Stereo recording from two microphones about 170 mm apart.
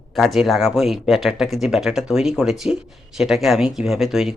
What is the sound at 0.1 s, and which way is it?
Speech, centre (ahead or behind).